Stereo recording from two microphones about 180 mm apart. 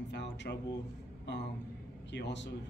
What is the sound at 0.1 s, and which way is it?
Speech, 70° left (ahead or behind).